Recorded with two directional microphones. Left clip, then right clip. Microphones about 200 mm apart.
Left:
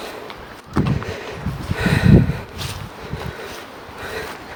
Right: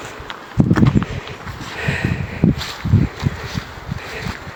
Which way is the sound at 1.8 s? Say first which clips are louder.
Left 2 dB; 25° left (ahead or behind).